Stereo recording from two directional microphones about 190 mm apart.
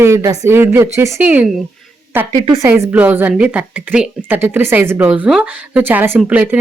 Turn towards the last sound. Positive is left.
turn(degrees=-10)  # may be behind; listen again after turning